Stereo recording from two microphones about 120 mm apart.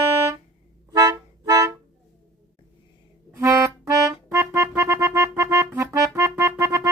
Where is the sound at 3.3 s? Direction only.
25° right (ahead or behind).